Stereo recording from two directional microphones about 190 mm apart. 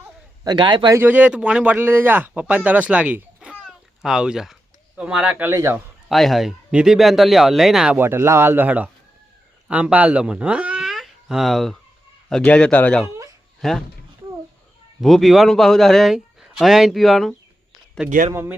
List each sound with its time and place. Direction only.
0.4 s speech: 25° right (ahead or behind)
0.9 s speech: 10° right (ahead or behind)
6.1 s speech: centre (ahead or behind)
15.0 s speech: centre (ahead or behind)